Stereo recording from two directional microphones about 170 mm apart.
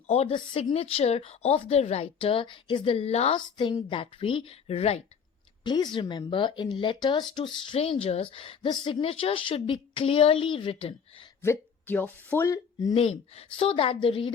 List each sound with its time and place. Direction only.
0.1 s speech: 35° left (ahead or behind)
5.6 s speech: 25° left (ahead or behind)
11.4 s speech: 10° left (ahead or behind)
12.9 s speech: 35° left (ahead or behind)